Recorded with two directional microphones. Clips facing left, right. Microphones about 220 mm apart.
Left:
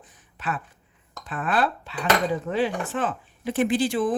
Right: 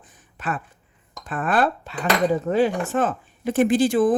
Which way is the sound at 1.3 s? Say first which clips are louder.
Right 3 dB; 45° right (ahead or behind).